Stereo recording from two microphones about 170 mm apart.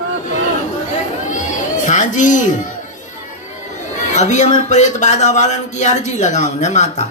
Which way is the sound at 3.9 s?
45° left (ahead or behind).